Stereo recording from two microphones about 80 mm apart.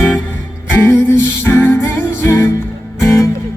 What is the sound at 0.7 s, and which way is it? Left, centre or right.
Music, left.